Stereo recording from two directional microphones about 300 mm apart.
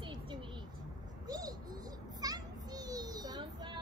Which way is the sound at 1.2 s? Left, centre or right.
Centre.